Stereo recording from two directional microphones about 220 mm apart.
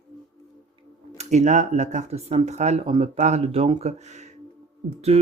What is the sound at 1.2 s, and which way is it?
Speech, 30° right (ahead or behind).